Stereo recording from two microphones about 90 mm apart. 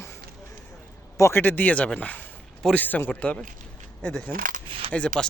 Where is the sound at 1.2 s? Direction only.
30° left (ahead or behind).